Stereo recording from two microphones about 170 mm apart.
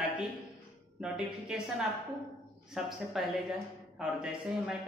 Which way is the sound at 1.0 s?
5° right (ahead or behind).